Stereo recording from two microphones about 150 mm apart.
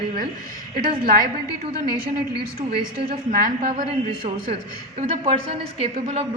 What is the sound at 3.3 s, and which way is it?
Speech, 65° right (ahead or behind).